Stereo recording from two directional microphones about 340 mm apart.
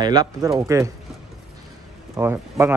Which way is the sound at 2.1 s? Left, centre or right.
Centre.